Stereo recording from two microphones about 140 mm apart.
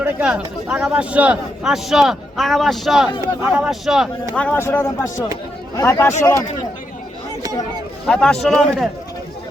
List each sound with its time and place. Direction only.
0.0 s speech: 10° right (ahead or behind)
4.4 s speech: 15° left (ahead or behind)
8.0 s speech: 5° left (ahead or behind)